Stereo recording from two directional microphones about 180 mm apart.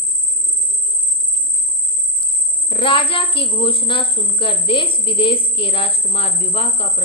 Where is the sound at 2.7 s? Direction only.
30° left (ahead or behind).